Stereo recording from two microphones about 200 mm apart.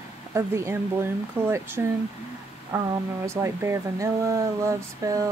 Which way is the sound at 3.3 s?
15° right (ahead or behind).